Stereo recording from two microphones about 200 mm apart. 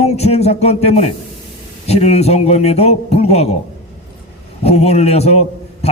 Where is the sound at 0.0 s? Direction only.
30° left (ahead or behind).